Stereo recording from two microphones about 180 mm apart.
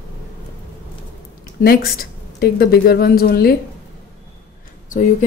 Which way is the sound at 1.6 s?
55° left (ahead or behind).